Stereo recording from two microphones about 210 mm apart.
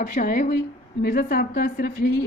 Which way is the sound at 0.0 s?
40° left (ahead or behind).